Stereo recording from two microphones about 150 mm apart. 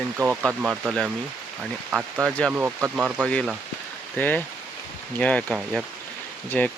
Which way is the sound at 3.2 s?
5° left (ahead or behind).